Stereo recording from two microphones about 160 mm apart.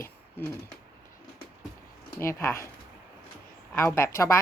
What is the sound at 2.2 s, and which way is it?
Speech, 15° left (ahead or behind).